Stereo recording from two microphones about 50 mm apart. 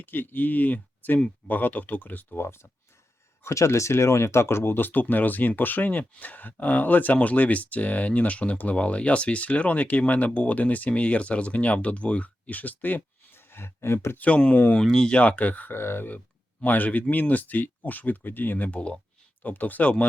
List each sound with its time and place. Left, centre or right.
0.0 s speech: left
2.4 s speech: left
3.4 s speech: left
4.9 s speech: left
14.2 s speech: left
14.8 s speech: centre
15.1 s speech: left
15.7 s speech: left
16.6 s speech: left